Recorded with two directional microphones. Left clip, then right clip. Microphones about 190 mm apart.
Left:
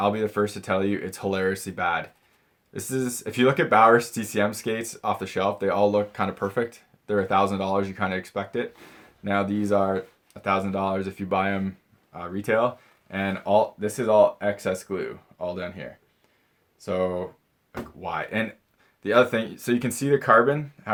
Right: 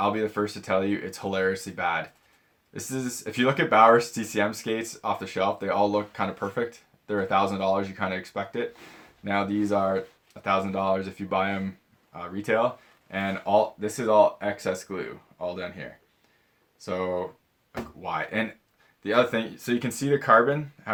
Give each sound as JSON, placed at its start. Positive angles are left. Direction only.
{"t": 0.0, "sound": "speech", "side_deg": 40}